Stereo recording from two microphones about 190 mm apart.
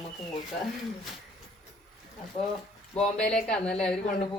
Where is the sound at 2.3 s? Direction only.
35° left (ahead or behind).